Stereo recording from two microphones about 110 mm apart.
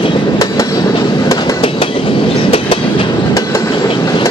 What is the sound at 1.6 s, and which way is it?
Train, 55° left (ahead or behind).